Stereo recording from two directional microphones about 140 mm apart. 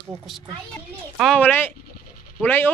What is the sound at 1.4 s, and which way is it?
Speech, 15° left (ahead or behind).